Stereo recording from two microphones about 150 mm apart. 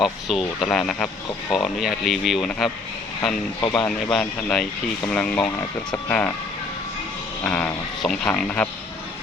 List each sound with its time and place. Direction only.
0.0 s speech: centre (ahead or behind)
3.6 s speech: 30° left (ahead or behind)
3.8 s speech: 5° left (ahead or behind)
5.4 s speech: 25° left (ahead or behind)
6.1 s speech: 10° left (ahead or behind)
7.4 s speech: 5° left (ahead or behind)